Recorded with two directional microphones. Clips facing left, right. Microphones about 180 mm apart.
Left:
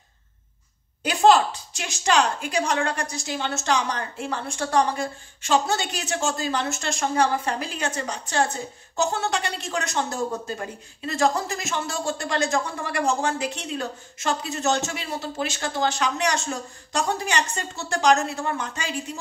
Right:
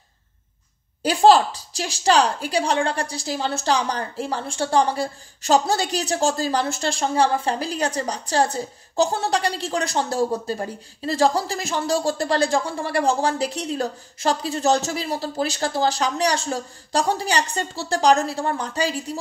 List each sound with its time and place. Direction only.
1.0 s a woman's voice: 35° right (ahead or behind)